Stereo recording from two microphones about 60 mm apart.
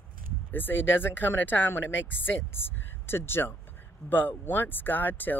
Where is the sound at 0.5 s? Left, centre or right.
Left.